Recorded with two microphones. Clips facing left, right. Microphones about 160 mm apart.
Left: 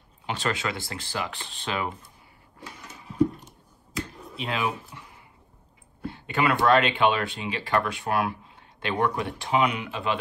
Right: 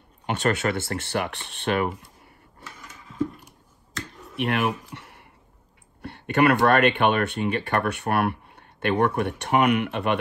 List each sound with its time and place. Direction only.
0.3 s speech: 60° right (ahead or behind)
3.9 s finger snapping: centre (ahead or behind)
4.4 s speech: 70° right (ahead or behind)
6.1 s a sound: 65° right (ahead or behind)
6.5 s speech: 55° right (ahead or behind)